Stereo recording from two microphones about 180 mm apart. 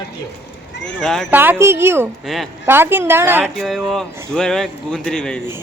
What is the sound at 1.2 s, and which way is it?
A woman's voice, 10° right (ahead or behind).